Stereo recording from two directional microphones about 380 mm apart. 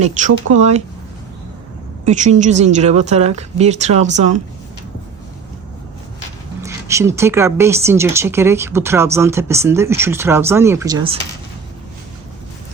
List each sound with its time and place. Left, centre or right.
0.5 s speech: centre
2.0 s speech: centre
6.6 s speech: centre